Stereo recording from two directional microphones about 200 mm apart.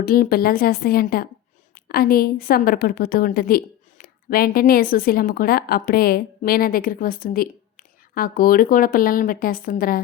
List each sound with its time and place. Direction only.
0.0 s a woman's voice: 45° left (ahead or behind)